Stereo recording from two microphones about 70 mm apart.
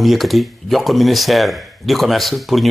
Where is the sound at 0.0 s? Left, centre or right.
Centre.